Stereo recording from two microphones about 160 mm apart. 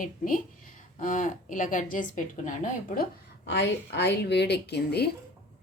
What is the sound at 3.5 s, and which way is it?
Speech, 90° left.